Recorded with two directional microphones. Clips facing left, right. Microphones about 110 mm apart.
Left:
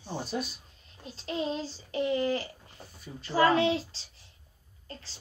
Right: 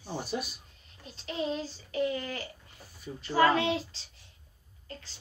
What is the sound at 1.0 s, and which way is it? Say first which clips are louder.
A child's voice: left 1 dB; 35° left (ahead or behind).